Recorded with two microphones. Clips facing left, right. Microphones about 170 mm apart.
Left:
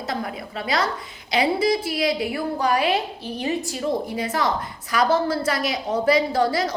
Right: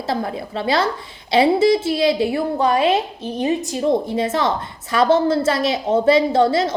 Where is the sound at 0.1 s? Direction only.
30° right (ahead or behind).